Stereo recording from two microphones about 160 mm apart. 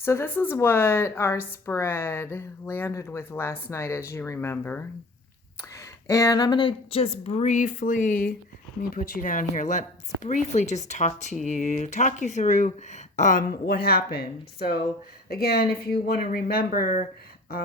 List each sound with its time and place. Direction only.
0.0 s a woman's voice: 15° left (ahead or behind); by 17.0 s 60° left (ahead or behind)